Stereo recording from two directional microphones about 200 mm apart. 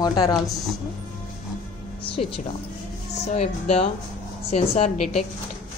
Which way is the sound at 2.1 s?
25° left (ahead or behind).